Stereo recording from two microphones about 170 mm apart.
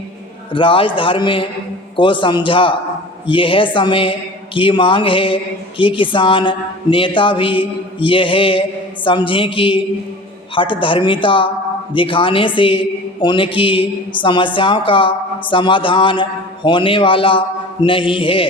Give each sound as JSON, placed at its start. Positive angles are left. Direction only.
{"t": 0.5, "sound": "a woman's voice", "side_deg": 30}